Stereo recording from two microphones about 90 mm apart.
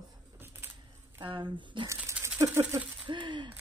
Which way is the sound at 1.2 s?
70° right (ahead or behind).